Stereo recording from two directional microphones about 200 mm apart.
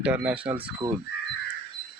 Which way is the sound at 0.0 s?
5° right (ahead or behind).